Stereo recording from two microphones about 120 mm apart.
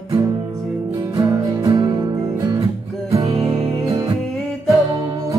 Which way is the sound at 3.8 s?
35° right (ahead or behind).